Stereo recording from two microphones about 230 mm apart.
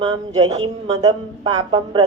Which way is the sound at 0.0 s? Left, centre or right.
Right.